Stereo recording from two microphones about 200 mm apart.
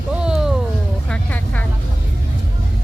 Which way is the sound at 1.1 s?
5° left (ahead or behind).